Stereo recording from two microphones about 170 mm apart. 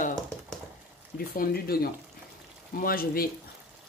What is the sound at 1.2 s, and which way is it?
Speech, 60° left (ahead or behind).